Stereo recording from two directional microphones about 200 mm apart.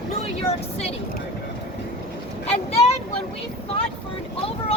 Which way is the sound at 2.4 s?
30° left (ahead or behind).